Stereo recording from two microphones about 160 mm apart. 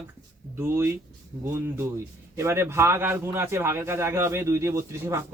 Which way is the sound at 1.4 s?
15° right (ahead or behind).